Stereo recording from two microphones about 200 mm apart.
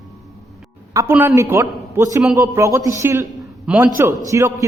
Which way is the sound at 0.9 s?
15° right (ahead or behind).